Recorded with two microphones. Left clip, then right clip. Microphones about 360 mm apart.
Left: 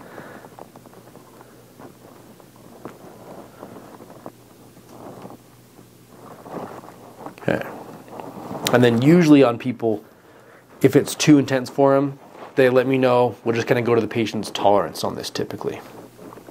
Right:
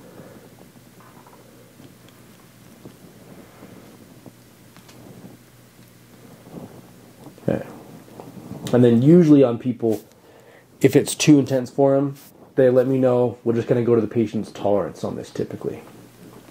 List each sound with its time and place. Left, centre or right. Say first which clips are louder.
8.6 s speech: even; left
10.8 s speech: even; centre
11.4 s speech: even; left
12.5 s speech: even; left